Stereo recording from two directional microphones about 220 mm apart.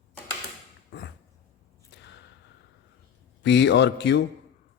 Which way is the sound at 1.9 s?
50° left (ahead or behind).